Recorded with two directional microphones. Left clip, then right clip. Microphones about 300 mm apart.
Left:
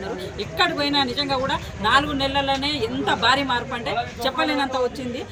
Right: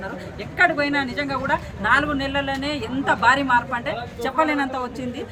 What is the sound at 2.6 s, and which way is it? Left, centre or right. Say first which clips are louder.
Speech: left 2 dB; centre.